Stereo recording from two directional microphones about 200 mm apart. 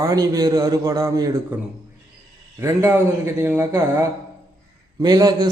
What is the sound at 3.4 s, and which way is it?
A man's voice, 10° right (ahead or behind).